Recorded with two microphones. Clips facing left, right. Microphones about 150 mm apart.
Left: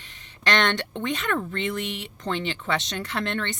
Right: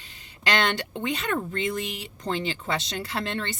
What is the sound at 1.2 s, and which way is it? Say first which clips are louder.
Speech: even; 35° right (ahead or behind).